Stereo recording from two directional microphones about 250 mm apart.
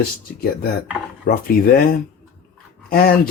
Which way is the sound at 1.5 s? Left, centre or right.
Left.